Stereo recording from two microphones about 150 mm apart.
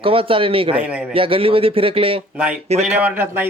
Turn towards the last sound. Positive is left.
turn(degrees=-15)  # may be behind; listen again after turning